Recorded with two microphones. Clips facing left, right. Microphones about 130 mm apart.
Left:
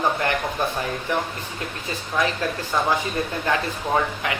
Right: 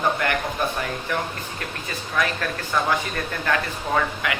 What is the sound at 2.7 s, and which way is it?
Speech, 25° left (ahead or behind).